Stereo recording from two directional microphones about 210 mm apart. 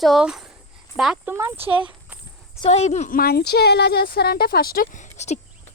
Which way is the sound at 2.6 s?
30° left (ahead or behind).